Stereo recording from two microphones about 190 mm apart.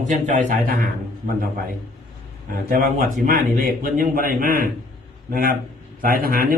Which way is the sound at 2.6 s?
50° right (ahead or behind).